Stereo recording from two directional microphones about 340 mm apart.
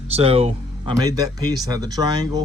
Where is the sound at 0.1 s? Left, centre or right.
Centre.